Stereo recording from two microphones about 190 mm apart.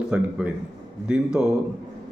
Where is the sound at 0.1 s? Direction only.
5° right (ahead or behind).